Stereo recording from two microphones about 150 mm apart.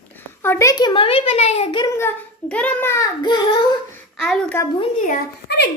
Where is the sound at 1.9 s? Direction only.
10° left (ahead or behind).